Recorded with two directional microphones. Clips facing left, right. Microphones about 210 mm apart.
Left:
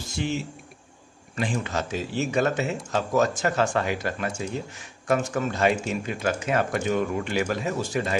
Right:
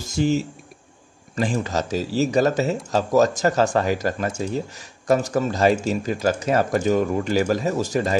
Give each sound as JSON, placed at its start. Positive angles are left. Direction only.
{"t": 0.0, "sound": "speech", "side_deg": -40}